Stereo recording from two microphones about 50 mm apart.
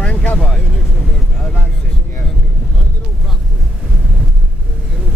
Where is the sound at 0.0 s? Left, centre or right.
Left.